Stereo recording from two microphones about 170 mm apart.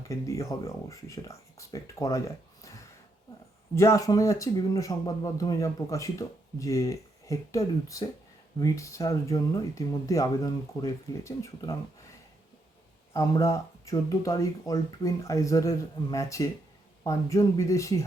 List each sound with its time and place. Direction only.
0.0 s speech: 20° left (ahead or behind)
3.8 s speech: 20° left (ahead or behind)
13.1 s speech: 15° left (ahead or behind)